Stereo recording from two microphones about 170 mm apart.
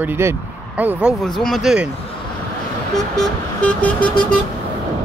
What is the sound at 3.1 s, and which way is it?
Vehicle, 10° left (ahead or behind).